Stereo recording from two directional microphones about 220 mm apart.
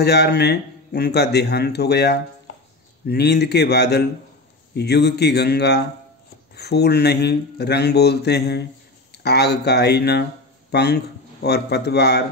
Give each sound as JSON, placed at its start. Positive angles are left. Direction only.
{"t": 0.0, "sound": "a man's voice", "side_deg": 50}